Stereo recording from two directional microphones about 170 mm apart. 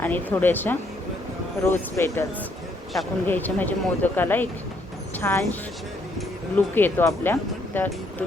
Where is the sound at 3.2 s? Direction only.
10° left (ahead or behind).